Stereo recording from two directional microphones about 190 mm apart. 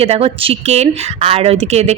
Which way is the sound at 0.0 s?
30° right (ahead or behind).